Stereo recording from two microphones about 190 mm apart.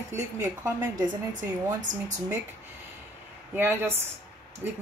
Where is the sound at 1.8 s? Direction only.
40° right (ahead or behind).